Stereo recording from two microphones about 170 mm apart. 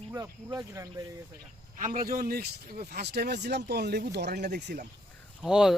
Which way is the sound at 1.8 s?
55° right (ahead or behind).